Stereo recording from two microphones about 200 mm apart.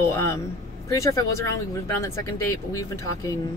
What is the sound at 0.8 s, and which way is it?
Speech, 15° left (ahead or behind).